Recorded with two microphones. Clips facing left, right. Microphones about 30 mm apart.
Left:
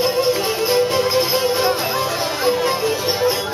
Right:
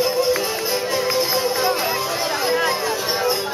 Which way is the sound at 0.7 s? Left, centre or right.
Left.